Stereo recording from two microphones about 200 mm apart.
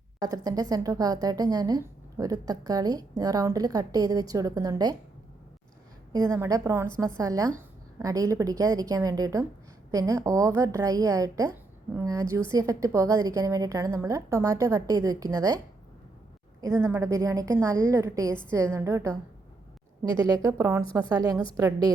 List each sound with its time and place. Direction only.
0.2 s a woman's voice: 15° right (ahead or behind)
6.1 s a woman's voice: 15° right (ahead or behind)
16.8 s a woman's voice: 15° right (ahead or behind)
20.1 s a woman's voice: 20° right (ahead or behind)